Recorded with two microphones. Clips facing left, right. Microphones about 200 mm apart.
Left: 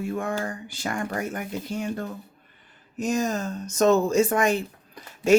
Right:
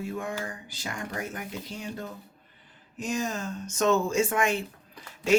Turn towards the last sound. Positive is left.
turn(degrees=45)  # may be behind; listen again after turning